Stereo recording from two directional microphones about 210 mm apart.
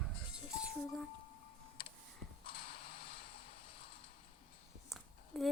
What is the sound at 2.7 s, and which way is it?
Vehicle, 25° left (ahead or behind).